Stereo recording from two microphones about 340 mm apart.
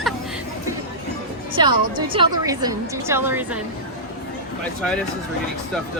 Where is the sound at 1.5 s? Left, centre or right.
Centre.